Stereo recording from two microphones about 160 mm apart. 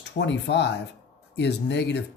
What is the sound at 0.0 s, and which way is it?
Speech, 90° left.